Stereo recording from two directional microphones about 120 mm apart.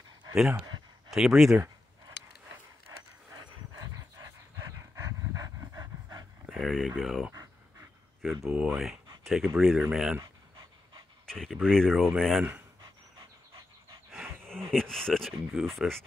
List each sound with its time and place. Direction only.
1.1 s speech: 5° right (ahead or behind)
1.5 s a sound: 25° right (ahead or behind)
4.6 s pant: 25° right (ahead or behind)
6.5 s speech: centre (ahead or behind)
8.5 s speech: 5° right (ahead or behind)
11.2 s speech: 5° left (ahead or behind)
14.1 s speech: 5° left (ahead or behind)